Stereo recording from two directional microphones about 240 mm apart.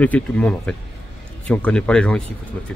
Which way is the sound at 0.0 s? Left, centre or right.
Centre.